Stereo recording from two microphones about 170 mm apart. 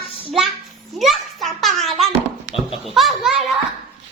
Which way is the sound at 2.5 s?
45° right (ahead or behind).